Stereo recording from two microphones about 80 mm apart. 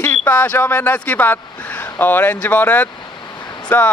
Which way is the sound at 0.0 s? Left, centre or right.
Centre.